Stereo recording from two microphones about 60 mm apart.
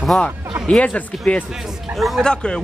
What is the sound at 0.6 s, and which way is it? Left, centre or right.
Speech, left.